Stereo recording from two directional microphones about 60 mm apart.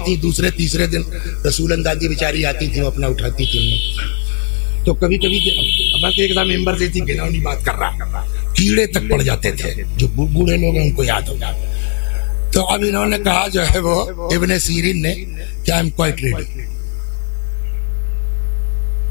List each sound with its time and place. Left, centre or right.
0.0 s a man's voice: centre
8.5 s a man's voice: centre